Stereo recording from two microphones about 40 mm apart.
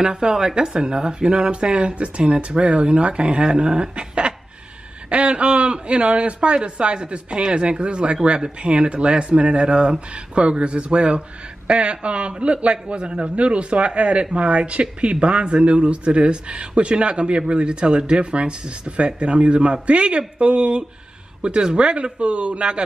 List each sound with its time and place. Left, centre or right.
0.0 s speech: centre
13.0 s speech: centre
13.4 s speech: right